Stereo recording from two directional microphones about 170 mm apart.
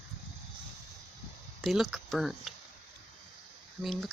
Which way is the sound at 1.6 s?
Centre (ahead or behind).